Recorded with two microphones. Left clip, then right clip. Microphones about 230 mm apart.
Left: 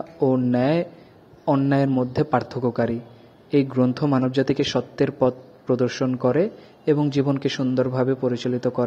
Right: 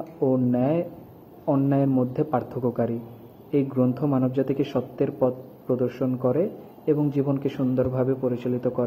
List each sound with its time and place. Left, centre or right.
0.2 s a man's voice: left